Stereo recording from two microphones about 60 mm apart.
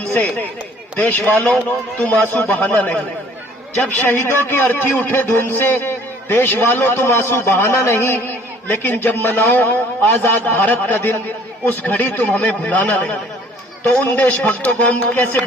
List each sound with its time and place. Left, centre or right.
0.9 s a man's voice: left
2.2 s a man's voice: left
4.0 s a man's voice: left